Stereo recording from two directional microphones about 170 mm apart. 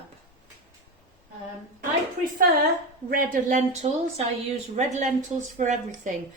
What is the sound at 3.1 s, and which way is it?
Speech, 50° right (ahead or behind).